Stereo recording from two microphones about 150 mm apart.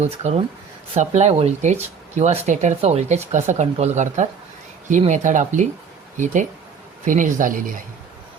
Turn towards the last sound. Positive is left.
turn(degrees=-65)  # may be behind; listen again after turning